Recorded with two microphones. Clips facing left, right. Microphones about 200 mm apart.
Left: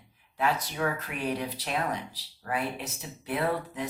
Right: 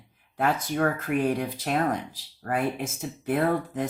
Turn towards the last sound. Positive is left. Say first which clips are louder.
# right 5 dB
turn(degrees=-50)  # may be behind; listen again after turning